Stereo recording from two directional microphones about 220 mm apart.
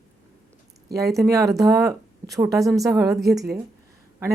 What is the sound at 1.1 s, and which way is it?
A woman's voice, 15° right (ahead or behind).